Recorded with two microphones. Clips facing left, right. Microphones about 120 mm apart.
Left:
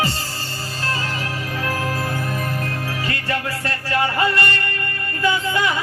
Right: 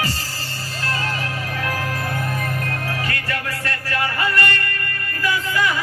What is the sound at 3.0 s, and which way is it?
Music, 25° left (ahead or behind).